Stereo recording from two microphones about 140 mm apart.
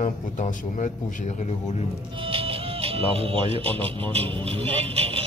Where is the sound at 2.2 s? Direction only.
40° right (ahead or behind).